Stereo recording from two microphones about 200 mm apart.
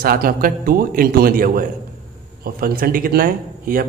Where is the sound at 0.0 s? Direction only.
45° right (ahead or behind).